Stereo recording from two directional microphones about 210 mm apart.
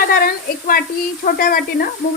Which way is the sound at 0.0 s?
45° left (ahead or behind).